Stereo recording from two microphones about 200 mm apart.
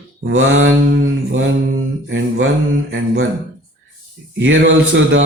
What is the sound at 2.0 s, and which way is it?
Speech, 75° right (ahead or behind).